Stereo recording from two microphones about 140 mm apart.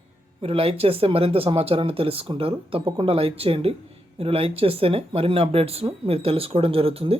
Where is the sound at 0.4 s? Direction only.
45° right (ahead or behind).